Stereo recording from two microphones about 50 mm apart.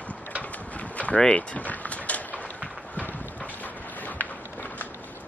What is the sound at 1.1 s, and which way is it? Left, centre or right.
Run, centre.